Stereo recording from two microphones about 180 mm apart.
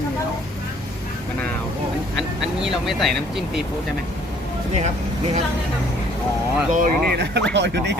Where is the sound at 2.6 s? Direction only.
Centre (ahead or behind).